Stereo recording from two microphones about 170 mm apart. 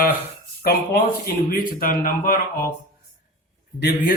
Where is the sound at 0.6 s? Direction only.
65° left (ahead or behind).